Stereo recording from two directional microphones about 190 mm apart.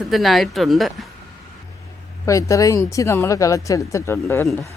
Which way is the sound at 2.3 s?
15° left (ahead or behind).